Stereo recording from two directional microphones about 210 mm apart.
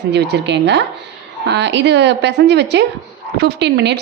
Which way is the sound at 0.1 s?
55° right (ahead or behind).